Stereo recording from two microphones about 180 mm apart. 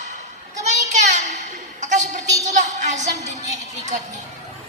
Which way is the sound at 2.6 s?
40° right (ahead or behind).